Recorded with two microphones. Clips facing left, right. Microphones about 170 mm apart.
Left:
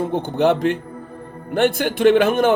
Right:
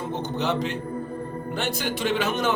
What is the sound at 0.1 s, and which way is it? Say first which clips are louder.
A man's voice: left 6 dB; 55° left (ahead or behind).